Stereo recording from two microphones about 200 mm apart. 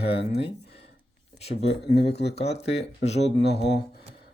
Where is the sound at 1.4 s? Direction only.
30° left (ahead or behind).